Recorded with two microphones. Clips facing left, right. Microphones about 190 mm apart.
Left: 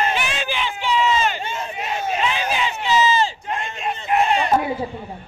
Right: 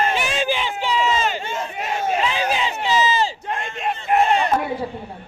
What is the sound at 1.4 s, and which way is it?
Crowd, 20° left (ahead or behind).